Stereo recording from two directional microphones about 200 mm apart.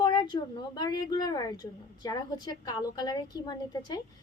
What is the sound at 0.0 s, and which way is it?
A woman's voice, 20° left (ahead or behind).